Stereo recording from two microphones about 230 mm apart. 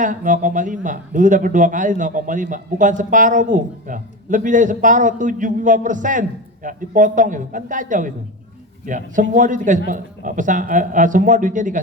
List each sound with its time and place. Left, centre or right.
0.0 s a man's voice: right